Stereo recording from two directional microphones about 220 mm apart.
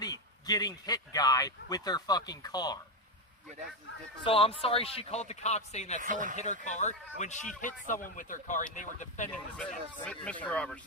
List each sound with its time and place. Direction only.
0.0 s speech: 20° left (ahead or behind)
4.2 s a man's voice: 25° left (ahead or behind)
6.0 s speech: 35° right (ahead or behind)
6.3 s speech: 35° left (ahead or behind)
9.3 s speech: 5° left (ahead or behind)